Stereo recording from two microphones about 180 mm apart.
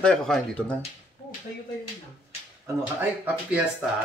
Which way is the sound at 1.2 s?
70° left (ahead or behind).